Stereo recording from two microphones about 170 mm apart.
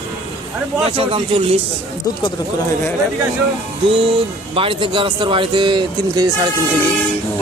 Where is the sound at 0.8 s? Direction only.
35° right (ahead or behind).